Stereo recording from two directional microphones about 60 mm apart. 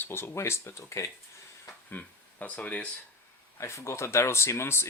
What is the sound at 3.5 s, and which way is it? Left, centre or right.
Speech, left.